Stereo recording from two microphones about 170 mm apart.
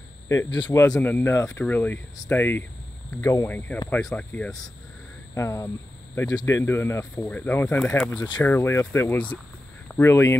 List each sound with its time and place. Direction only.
0.3 s speech: 20° left (ahead or behind)